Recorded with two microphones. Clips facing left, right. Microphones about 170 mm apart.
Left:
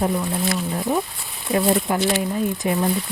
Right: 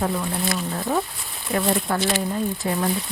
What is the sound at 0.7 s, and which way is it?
Speech, 15° left (ahead or behind).